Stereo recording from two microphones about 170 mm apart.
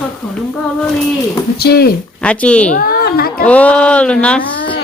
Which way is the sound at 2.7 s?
60° left (ahead or behind).